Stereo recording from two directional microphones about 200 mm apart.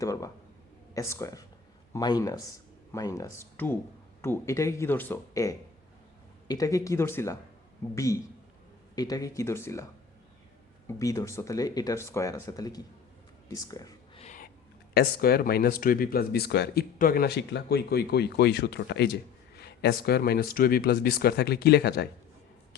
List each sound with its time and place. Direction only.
0.0 s speech: 15° left (ahead or behind)
10.8 s speech: 15° left (ahead or behind)
14.2 s a sound: 40° left (ahead or behind)
14.9 s speech: 50° left (ahead or behind)